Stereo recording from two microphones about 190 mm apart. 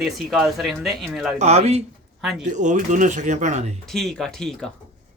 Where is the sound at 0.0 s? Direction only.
Centre (ahead or behind).